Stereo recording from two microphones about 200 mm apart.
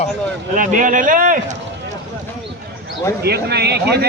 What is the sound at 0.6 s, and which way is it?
Speech, 40° right (ahead or behind).